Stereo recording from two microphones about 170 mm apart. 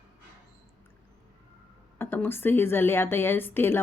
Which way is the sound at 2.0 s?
10° left (ahead or behind).